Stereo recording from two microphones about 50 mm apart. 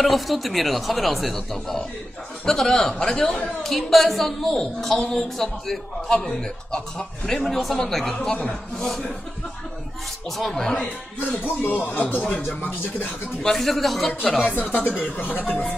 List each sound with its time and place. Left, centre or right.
0.0 s a woman's voice: centre
10.3 s a woman's voice: centre
11.4 s speech: left
13.4 s speech: centre
14.5 s speech: left